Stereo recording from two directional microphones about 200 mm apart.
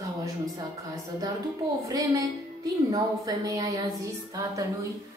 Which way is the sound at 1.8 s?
15° right (ahead or behind).